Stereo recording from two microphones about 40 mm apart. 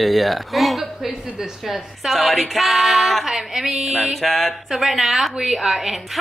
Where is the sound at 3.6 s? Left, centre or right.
Right.